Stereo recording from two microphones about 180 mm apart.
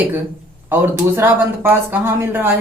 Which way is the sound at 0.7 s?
10° right (ahead or behind).